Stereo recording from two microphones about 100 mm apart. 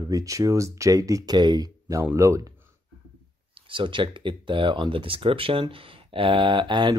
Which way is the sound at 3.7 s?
55° right (ahead or behind).